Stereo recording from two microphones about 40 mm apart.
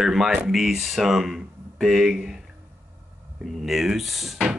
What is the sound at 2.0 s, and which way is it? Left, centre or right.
Speech, centre.